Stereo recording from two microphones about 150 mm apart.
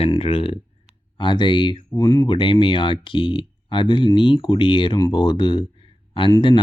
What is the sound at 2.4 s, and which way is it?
Speech, 35° left (ahead or behind).